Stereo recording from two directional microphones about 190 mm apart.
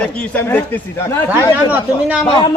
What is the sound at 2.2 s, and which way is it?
Speech, 25° left (ahead or behind).